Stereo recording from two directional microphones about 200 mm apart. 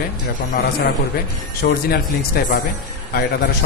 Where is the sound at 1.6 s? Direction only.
50° left (ahead or behind).